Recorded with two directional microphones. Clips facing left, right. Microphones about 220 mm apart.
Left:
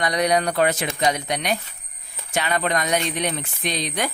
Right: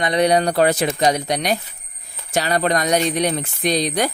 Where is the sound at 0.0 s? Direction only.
25° right (ahead or behind).